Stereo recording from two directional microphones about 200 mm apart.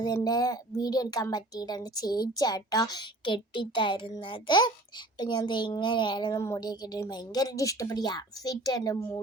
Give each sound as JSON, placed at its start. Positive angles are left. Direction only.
{"t": 0.0, "sound": "a woman's voice", "side_deg": 20}